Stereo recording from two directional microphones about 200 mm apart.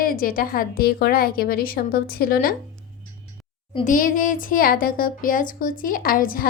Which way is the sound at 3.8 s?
40° left (ahead or behind).